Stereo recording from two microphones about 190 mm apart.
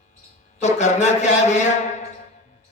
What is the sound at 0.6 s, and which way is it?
A man's voice, 35° left (ahead or behind).